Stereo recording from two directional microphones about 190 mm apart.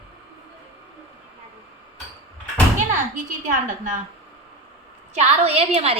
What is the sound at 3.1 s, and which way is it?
Speech, 45° right (ahead or behind).